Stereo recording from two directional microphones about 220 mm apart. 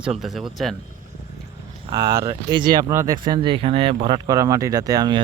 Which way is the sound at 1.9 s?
15° right (ahead or behind).